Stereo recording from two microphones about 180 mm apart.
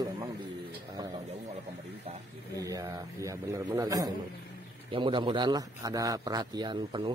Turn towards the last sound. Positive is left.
turn(degrees=-25)  # may be behind; listen again after turning